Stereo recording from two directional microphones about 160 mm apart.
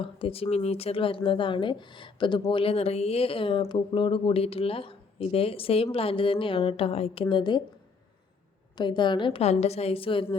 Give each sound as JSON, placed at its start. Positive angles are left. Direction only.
{"t": 0.0, "sound": "speech", "side_deg": 35}
{"t": 8.8, "sound": "speech", "side_deg": 30}